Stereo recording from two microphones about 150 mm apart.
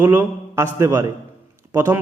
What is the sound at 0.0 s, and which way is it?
Speech, 15° right (ahead or behind).